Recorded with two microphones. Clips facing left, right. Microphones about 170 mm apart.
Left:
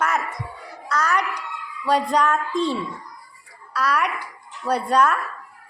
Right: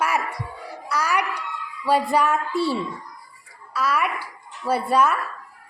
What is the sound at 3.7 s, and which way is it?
Speech, 5° right (ahead or behind).